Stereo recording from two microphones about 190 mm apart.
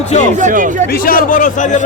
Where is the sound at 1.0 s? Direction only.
45° left (ahead or behind).